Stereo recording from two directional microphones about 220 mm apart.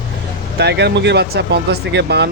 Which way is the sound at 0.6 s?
50° right (ahead or behind).